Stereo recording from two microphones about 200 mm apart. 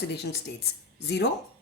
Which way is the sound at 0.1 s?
55° left (ahead or behind).